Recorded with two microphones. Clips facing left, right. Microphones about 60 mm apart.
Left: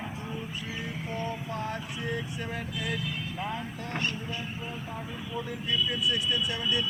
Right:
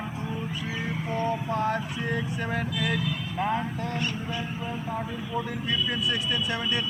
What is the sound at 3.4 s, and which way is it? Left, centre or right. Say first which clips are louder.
Speech: right 9 dB; right.